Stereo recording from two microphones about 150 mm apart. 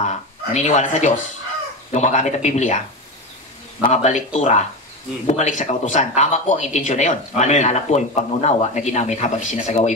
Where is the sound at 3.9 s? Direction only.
50° left (ahead or behind).